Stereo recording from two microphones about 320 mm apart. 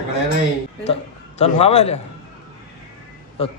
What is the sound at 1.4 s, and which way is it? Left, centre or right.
Speech, centre.